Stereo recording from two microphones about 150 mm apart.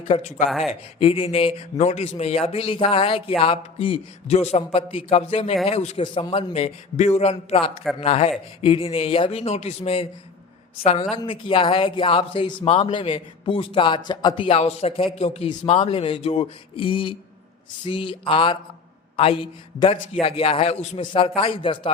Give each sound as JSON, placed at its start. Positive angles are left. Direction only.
{"t": 0.2, "sound": "a man's voice", "side_deg": 50}
{"t": 0.7, "sound": "a man's voice", "side_deg": 40}
{"t": 11.1, "sound": "a man's voice", "side_deg": 35}